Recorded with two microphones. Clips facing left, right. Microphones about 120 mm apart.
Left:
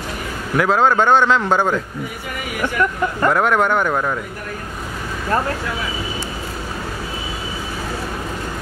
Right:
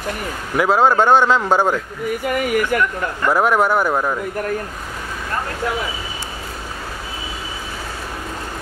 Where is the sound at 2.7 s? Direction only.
60° right (ahead or behind).